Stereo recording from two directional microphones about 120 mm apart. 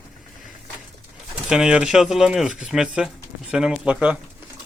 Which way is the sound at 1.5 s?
5° right (ahead or behind).